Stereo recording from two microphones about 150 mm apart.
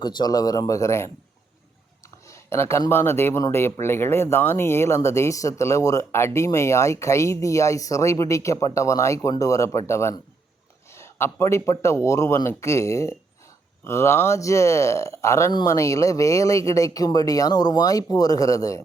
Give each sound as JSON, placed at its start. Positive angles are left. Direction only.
{"t": 0.0, "sound": "speech", "side_deg": 30}